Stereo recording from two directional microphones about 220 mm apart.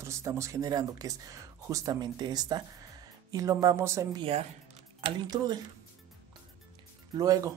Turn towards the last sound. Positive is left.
turn(degrees=-15)  # may be behind; listen again after turning